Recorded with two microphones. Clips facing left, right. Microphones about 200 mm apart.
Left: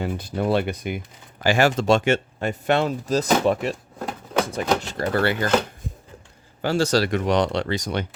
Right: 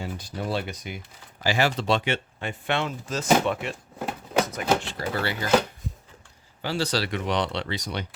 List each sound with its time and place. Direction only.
0.0 s speech: 55° left (ahead or behind); by 3.8 s 40° left (ahead or behind)
3.9 s a sound: 5° right (ahead or behind)
4.8 s speech: 45° left (ahead or behind)
6.6 s speech: 45° left (ahead or behind)